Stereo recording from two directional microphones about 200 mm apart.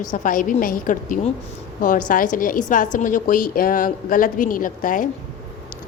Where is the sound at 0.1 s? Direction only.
40° left (ahead or behind).